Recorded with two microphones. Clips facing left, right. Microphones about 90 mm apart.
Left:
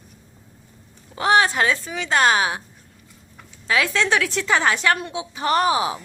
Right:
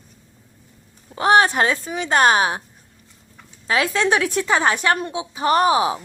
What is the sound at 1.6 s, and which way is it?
Speech, 25° right (ahead or behind).